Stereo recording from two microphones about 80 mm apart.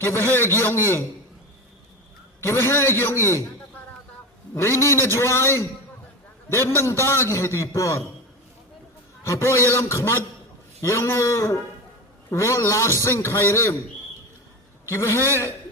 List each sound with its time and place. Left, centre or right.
0.0 s a man's voice: left
2.4 s a man's voice: left
4.5 s a man's voice: left
9.2 s a man's voice: left
14.8 s a man's voice: left